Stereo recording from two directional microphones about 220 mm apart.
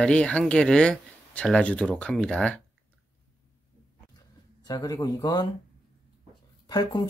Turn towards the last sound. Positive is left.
turn(degrees=15)  # may be behind; listen again after turning